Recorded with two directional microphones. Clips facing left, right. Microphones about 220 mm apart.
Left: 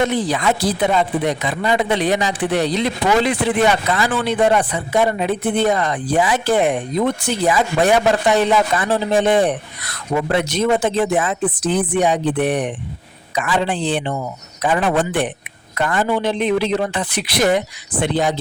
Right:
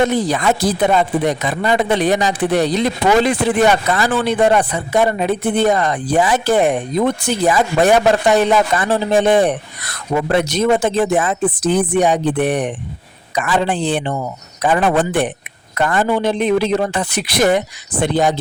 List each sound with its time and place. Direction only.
0.0 s speech: 45° right (ahead or behind)